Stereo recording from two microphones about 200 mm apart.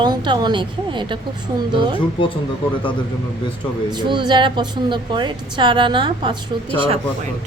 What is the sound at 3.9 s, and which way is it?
A woman's voice, 20° right (ahead or behind).